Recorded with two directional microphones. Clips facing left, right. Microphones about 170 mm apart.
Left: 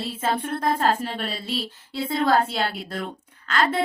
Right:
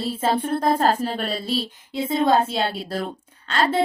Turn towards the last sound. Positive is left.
turn(degrees=-25)  # may be behind; listen again after turning